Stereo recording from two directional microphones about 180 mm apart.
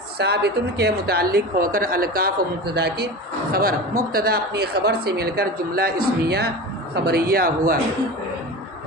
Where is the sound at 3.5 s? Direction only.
50° right (ahead or behind).